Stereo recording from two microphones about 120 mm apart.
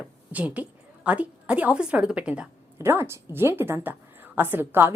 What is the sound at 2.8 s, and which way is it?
A woman's voice, 20° right (ahead or behind).